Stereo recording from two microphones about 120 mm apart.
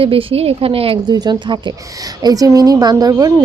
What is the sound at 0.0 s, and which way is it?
Speech, 50° right (ahead or behind).